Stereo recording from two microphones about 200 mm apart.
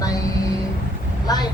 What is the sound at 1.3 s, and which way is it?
Speech, 20° left (ahead or behind).